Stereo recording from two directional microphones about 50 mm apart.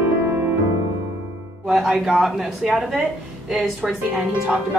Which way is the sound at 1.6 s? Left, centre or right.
Centre.